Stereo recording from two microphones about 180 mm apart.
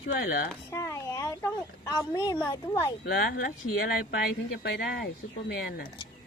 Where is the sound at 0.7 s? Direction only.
15° left (ahead or behind).